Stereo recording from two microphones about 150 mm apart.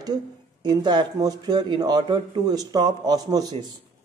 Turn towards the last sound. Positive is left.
turn(degrees=-25)  # may be behind; listen again after turning